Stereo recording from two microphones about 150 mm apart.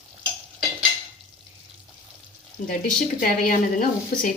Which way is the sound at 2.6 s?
60° left (ahead or behind).